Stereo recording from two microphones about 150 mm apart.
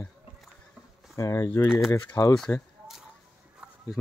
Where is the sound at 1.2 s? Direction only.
20° left (ahead or behind).